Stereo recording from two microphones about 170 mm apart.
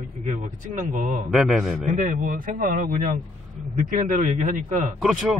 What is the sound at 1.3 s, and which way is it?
Speech, centre (ahead or behind).